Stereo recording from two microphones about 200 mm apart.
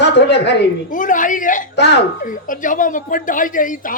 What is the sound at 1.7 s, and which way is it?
Speech, 60° left (ahead or behind).